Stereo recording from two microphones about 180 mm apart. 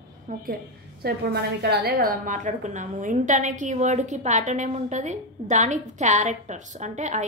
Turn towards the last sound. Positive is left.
turn(degrees=-40)  # may be behind; listen again after turning